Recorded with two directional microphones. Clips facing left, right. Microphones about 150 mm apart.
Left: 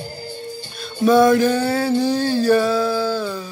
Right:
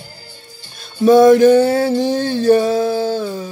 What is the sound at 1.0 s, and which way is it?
Music, 25° right (ahead or behind).